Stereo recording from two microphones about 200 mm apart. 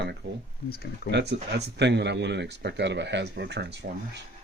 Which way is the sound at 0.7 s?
50° left (ahead or behind).